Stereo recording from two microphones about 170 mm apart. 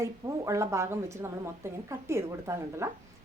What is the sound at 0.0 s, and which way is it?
A woman's voice, 15° right (ahead or behind).